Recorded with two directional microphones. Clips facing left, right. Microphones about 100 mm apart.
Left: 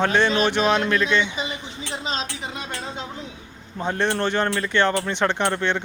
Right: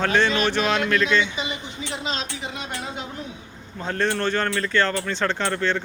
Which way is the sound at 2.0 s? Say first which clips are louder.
Left 2 dB; 35° left (ahead or behind).